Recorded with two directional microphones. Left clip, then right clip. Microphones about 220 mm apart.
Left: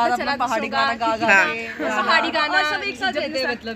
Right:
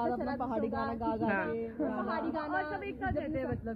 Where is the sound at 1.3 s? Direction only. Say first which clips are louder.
Left 17 dB; 15° left (ahead or behind).